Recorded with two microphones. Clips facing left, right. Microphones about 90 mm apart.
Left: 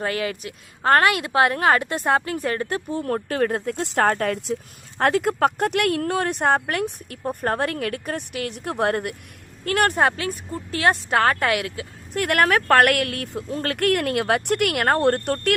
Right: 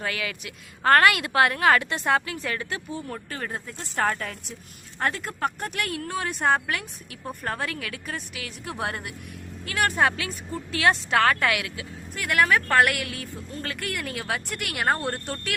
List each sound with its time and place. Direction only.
0.0 s speech: 40° left (ahead or behind)
3.0 s speech: 65° left (ahead or behind)
4.9 s speech: 80° left; by 10.1 s 60° left (ahead or behind)
10.1 s speech: 45° left (ahead or behind); by 15.5 s 60° left (ahead or behind)